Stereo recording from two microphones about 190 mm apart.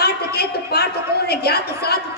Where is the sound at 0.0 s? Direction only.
55° left (ahead or behind).